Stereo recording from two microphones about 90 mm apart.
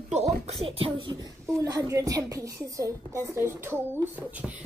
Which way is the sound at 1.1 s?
40° right (ahead or behind).